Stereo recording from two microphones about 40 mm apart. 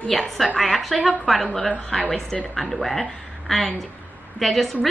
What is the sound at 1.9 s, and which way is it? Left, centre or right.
Speech, left.